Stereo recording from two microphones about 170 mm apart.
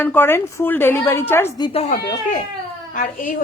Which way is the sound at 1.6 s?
35° left (ahead or behind).